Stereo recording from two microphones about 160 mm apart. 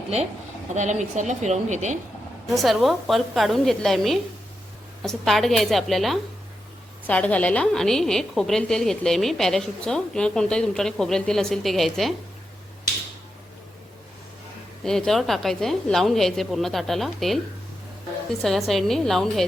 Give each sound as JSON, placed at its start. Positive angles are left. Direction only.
{"t": 0.7, "sound": "a woman's voice", "side_deg": -50}
{"t": 2.5, "sound": "a woman's voice", "side_deg": 0}
{"t": 14.8, "sound": "a woman's voice", "side_deg": 5}
{"t": 18.4, "sound": "a woman's voice", "side_deg": 0}